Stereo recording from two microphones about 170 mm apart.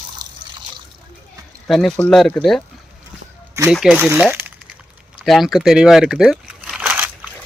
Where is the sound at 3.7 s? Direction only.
Centre (ahead or behind).